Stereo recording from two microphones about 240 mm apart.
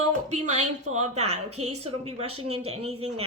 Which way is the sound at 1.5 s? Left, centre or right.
Right.